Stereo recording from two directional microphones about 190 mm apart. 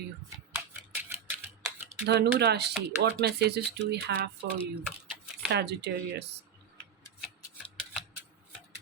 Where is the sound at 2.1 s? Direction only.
60° right (ahead or behind).